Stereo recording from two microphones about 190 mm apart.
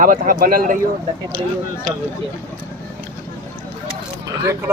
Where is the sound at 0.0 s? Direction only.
45° right (ahead or behind).